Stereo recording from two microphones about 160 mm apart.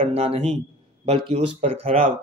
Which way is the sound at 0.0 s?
35° right (ahead or behind).